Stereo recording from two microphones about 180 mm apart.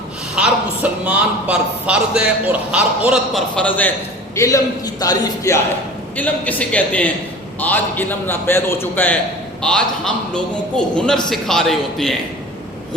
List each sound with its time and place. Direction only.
0.3 s speech: 5° right (ahead or behind)
4.4 s a man's voice: 20° left (ahead or behind)
6.1 s a man's voice: 10° left (ahead or behind)